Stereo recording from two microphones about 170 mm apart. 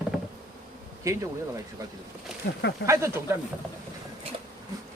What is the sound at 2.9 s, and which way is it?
Speech, 15° right (ahead or behind).